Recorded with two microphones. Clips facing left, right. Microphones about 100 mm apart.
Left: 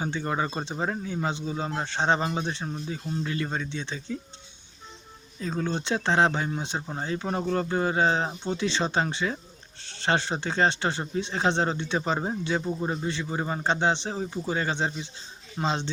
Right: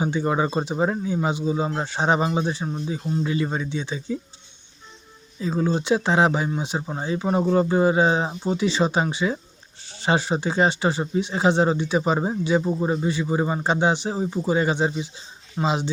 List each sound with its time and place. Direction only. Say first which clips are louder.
0.0 s speech: right 6 dB; 15° right (ahead or behind)
5.6 s speech: right 6 dB; 5° right (ahead or behind)
7.4 s speech: right 8 dB; 20° right (ahead or behind)
7.7 s speech: right 5 dB; 10° right (ahead or behind)